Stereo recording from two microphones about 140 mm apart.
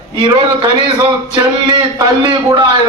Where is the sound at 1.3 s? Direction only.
30° right (ahead or behind).